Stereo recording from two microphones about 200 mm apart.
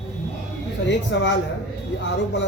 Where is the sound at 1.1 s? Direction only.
60° left (ahead or behind).